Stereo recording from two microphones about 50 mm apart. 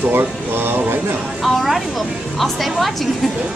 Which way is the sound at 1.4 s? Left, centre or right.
Centre.